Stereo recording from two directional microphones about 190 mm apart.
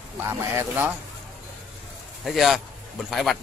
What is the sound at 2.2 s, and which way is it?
A man's voice, centre (ahead or behind).